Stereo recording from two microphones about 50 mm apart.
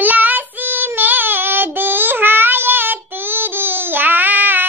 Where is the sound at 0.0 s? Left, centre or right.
Right.